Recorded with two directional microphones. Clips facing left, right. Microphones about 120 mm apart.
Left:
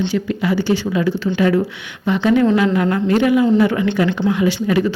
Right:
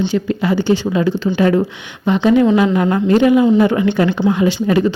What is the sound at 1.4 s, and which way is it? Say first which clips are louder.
Speech: right 2 dB; 35° right (ahead or behind).